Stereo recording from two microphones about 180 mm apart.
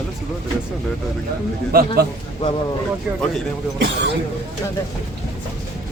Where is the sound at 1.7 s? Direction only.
55° right (ahead or behind).